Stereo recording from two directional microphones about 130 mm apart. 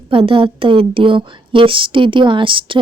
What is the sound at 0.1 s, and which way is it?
Speech, 45° right (ahead or behind).